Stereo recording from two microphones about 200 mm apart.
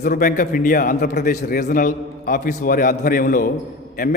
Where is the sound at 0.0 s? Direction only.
40° left (ahead or behind).